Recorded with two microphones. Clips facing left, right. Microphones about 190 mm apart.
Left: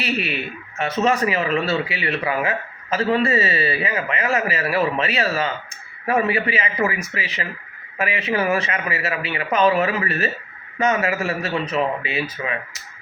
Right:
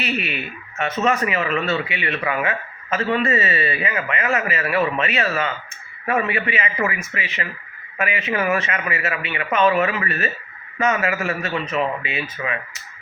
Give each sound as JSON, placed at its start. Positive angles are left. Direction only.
{"t": 0.0, "sound": "speech", "side_deg": 35}